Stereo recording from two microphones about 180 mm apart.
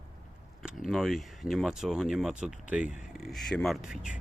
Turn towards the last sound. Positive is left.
turn(degrees=-5)  # may be behind; listen again after turning